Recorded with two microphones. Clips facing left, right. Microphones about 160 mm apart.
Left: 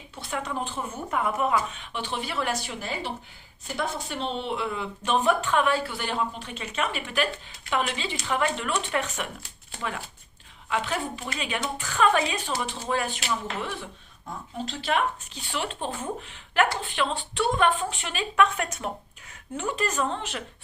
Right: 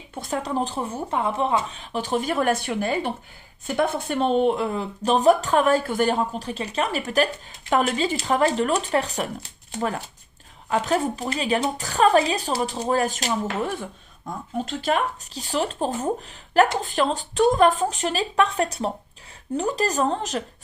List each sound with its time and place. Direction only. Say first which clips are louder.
0.1 s speech: right 5 dB; 40° right (ahead or behind)
10.7 s speech: right 6 dB; 40° right (ahead or behind)